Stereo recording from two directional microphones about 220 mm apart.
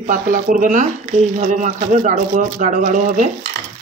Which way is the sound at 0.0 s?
35° right (ahead or behind).